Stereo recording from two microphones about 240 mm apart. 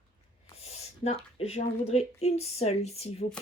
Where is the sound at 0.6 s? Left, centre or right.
Left.